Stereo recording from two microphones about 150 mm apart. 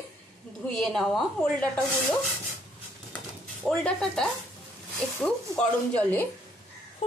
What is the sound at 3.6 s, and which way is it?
A woman's voice, centre (ahead or behind).